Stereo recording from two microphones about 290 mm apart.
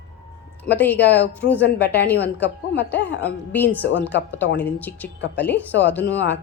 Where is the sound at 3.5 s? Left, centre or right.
Centre.